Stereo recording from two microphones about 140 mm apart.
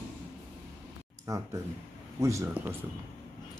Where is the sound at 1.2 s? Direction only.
20° right (ahead or behind).